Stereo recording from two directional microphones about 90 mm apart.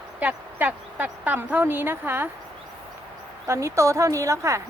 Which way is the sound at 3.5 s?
35° right (ahead or behind).